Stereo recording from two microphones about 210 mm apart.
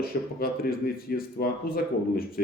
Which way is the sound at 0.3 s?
45° left (ahead or behind).